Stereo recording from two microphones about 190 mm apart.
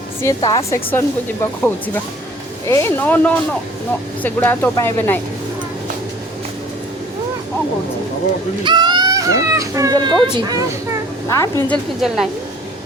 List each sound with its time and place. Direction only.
0.4 s a woman's voice: 20° left (ahead or behind)
0.9 s speech: 10° left (ahead or behind)
8.6 s speech: 25° right (ahead or behind)
11.3 s speech: 15° left (ahead or behind)
12.0 s a woman's voice: centre (ahead or behind)